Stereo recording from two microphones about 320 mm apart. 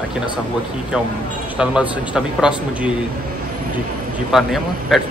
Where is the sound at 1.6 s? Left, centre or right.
Centre.